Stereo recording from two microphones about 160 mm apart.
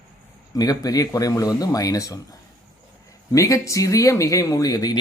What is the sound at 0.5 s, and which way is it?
Speech, 20° left (ahead or behind).